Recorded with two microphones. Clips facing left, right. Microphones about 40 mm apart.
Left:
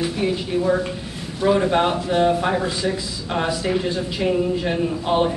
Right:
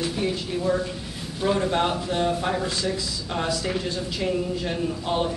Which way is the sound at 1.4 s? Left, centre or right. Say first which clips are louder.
Left 5 dB; centre.